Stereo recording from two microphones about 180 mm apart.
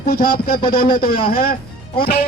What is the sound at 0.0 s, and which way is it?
A man's voice, 55° left (ahead or behind).